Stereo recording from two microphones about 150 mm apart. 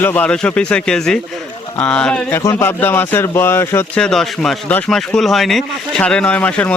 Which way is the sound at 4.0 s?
5° left (ahead or behind).